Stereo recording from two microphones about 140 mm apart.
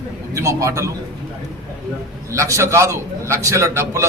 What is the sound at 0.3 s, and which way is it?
Speech, 20° right (ahead or behind).